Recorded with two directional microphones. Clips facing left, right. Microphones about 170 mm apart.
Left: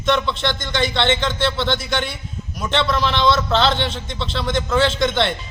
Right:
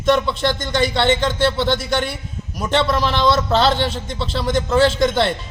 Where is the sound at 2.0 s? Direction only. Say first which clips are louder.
Right 2 dB; 10° right (ahead or behind).